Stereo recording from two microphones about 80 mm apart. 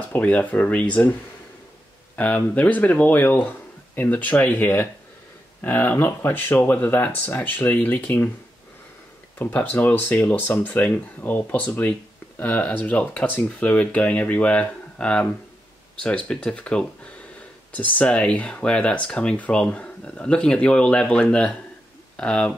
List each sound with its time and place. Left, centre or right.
0.1 s speech: centre
2.1 s speech: centre
9.4 s speech: centre